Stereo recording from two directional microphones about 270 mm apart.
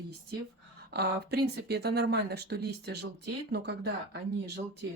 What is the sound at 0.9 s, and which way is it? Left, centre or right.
Speech, right.